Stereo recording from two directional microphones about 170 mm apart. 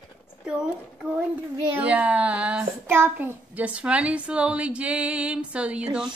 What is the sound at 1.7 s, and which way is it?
A child's voice, 10° right (ahead or behind).